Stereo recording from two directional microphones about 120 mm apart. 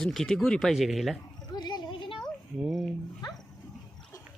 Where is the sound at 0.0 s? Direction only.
Centre (ahead or behind).